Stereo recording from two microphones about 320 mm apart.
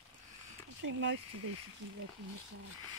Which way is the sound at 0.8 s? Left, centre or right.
Right.